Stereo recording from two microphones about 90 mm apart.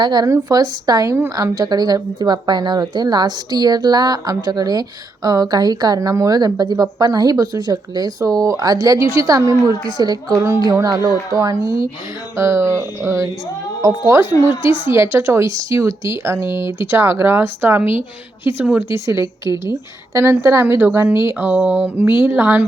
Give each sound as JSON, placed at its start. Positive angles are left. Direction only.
{"t": 0.0, "sound": "a woman's voice", "side_deg": -55}
{"t": 10.3, "sound": "speech", "side_deg": -30}
{"t": 10.6, "sound": "a woman's voice", "side_deg": -45}
{"t": 20.4, "sound": "speech", "side_deg": -30}